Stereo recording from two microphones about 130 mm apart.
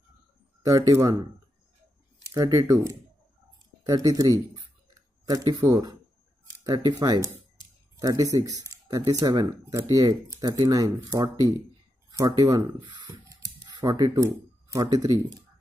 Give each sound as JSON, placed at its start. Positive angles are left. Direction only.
{"t": 0.6, "sound": "speech", "side_deg": -25}
{"t": 2.2, "sound": "speech", "side_deg": -30}
{"t": 13.1, "sound": "a sound", "side_deg": -25}